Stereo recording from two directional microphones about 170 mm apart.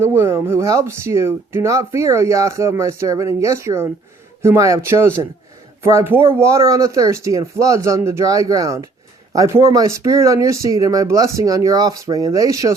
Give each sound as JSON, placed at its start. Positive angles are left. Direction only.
{"t": 0.0, "sound": "speech", "side_deg": -15}